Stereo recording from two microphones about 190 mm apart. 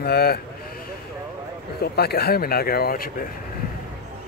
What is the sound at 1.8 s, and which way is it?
Speech, 55° left (ahead or behind).